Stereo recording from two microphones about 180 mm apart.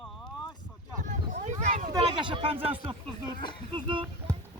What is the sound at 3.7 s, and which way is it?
Speech, 25° right (ahead or behind).